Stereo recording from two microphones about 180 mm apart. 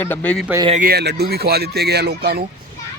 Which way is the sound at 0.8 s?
65° right (ahead or behind).